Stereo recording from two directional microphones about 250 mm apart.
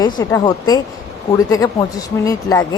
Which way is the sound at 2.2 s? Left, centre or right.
Centre.